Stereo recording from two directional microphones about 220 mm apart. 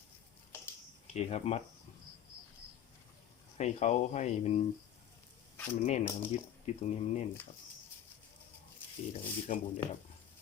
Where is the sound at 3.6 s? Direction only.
30° left (ahead or behind).